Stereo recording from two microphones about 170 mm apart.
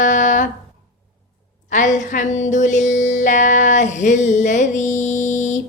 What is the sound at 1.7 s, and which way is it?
Speech, 45° left (ahead or behind).